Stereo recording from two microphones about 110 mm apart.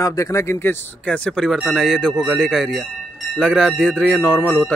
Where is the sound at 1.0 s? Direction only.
10° left (ahead or behind).